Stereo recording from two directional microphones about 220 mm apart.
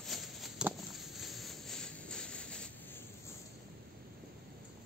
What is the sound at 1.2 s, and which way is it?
Train, centre (ahead or behind).